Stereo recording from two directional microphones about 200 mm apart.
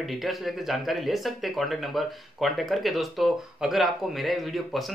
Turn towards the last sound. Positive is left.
turn(degrees=0)  # may be behind; listen again after turning